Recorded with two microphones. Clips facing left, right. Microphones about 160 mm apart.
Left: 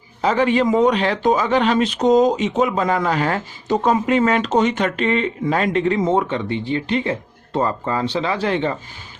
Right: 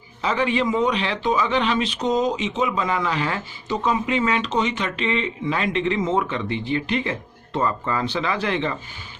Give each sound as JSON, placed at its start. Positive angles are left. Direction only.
{"t": 0.2, "sound": "a man's voice", "side_deg": 45}